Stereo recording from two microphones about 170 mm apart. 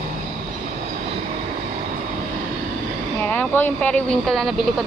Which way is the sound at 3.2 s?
10° left (ahead or behind).